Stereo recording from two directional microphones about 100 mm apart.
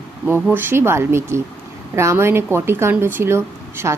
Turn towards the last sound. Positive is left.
turn(degrees=-25)  # may be behind; listen again after turning